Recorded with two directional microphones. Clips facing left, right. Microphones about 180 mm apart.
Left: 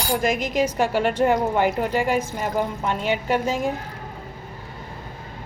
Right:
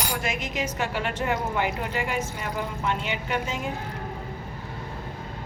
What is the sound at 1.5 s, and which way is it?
A woman's voice, 40° left (ahead or behind).